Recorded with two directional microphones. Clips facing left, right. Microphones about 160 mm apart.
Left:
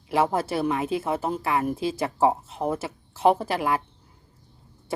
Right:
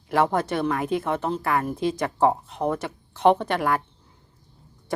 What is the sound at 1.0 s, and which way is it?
Speech, 5° left (ahead or behind).